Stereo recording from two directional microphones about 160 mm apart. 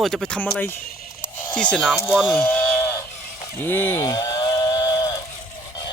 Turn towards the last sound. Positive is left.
turn(degrees=25)  # may be behind; listen again after turning